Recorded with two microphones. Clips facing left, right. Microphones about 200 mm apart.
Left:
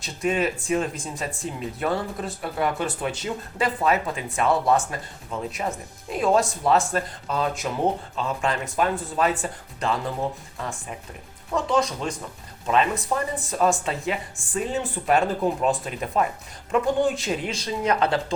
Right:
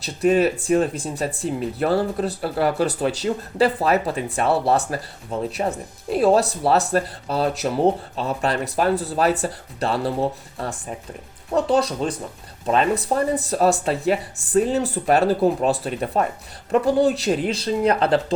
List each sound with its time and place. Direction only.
0.0 s speech: 35° right (ahead or behind)